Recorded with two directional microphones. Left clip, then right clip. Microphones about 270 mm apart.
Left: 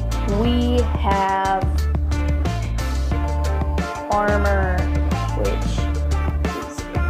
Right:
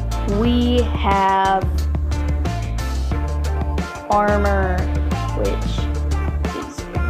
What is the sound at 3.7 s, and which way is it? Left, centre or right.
Music, centre.